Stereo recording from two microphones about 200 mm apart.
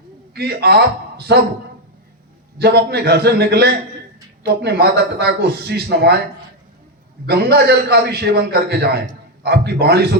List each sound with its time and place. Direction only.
0.3 s a man's voice: 55° right (ahead or behind)
2.6 s a man's voice: 55° right (ahead or behind)
7.3 s a man's voice: 55° right (ahead or behind)